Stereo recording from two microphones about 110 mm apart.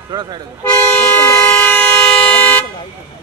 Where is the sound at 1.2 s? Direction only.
25° left (ahead or behind).